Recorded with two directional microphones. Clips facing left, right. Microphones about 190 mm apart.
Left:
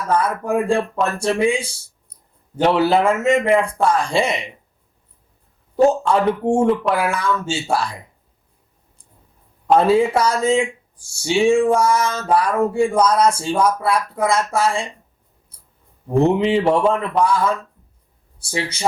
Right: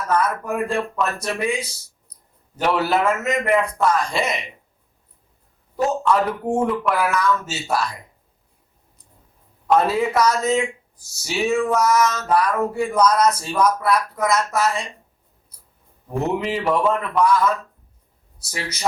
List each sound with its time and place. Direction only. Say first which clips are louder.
0.1 s speech: left 3 dB; 30° left (ahead or behind)
5.7 s speech: left 4 dB; 30° left (ahead or behind)
9.6 s speech: left 4 dB; 30° left (ahead or behind)
16.0 s speech: left 7 dB; 25° left (ahead or behind)